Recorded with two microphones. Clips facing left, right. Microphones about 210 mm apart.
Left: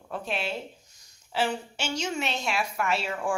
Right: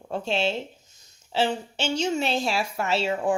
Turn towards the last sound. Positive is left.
turn(degrees=-25)  # may be behind; listen again after turning